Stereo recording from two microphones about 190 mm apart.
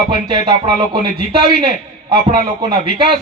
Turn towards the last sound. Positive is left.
turn(degrees=-25)  # may be behind; listen again after turning